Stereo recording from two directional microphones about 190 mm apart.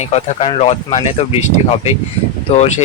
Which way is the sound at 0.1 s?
35° left (ahead or behind).